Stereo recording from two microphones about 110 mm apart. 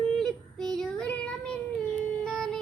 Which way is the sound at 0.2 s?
5° left (ahead or behind).